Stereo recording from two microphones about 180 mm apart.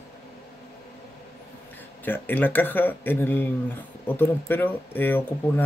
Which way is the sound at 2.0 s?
10° left (ahead or behind).